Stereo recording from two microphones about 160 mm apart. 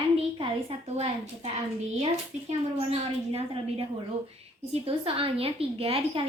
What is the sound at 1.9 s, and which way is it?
Speech, 40° right (ahead or behind).